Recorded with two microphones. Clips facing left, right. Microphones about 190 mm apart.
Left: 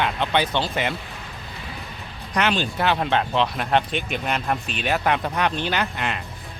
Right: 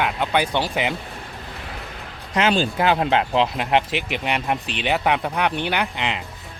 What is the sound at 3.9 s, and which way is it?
Speech, 85° right.